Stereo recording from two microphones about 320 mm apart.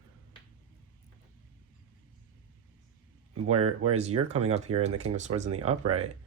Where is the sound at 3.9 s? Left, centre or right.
Centre.